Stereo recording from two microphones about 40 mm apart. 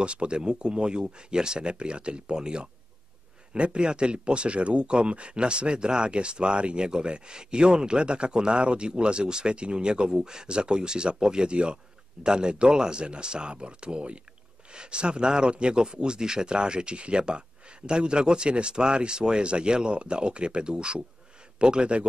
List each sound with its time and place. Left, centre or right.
0.0 s speech: right